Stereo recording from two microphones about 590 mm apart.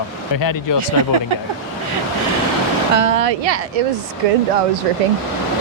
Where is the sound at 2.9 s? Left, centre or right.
Right.